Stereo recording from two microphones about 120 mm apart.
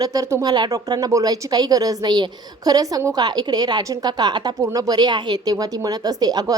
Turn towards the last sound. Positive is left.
turn(degrees=-35)  # may be behind; listen again after turning